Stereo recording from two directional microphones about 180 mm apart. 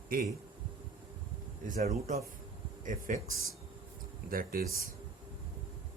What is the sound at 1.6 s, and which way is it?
A man's voice, 45° right (ahead or behind).